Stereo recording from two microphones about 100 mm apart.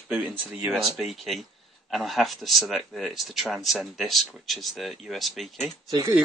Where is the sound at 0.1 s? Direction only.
20° right (ahead or behind).